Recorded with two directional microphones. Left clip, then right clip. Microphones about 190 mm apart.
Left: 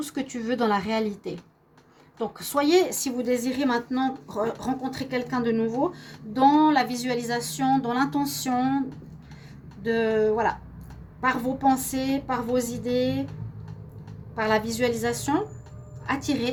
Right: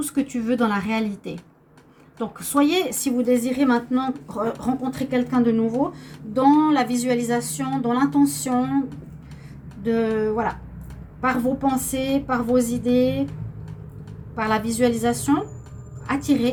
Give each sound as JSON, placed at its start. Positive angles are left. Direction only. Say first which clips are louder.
{"t": 0.0, "sound": "speech", "louder": "right 6 dB", "side_deg": 35}
{"t": 2.4, "sound": "a woman's voice", "louder": "right 1 dB", "side_deg": 40}
{"t": 9.8, "sound": "a woman's voice", "louder": "right 1 dB", "side_deg": 45}
{"t": 14.3, "sound": "a woman's voice", "louder": "right 2 dB", "side_deg": 45}